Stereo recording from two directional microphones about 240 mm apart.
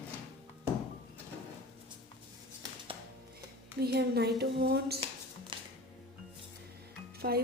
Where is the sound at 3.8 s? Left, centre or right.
Right.